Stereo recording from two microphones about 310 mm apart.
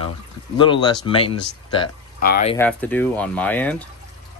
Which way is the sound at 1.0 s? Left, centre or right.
Centre.